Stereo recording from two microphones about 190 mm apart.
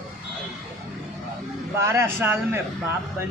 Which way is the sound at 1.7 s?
15° right (ahead or behind).